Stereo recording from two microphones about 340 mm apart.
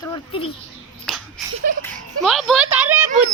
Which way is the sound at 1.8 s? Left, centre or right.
Centre.